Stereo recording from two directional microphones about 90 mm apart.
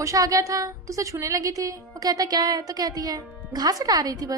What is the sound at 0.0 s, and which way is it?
A woman's voice, 35° right (ahead or behind).